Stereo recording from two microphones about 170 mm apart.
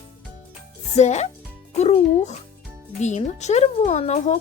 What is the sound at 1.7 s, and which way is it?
Music, 40° left (ahead or behind).